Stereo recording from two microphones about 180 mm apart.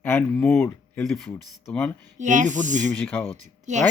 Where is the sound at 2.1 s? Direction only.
45° right (ahead or behind).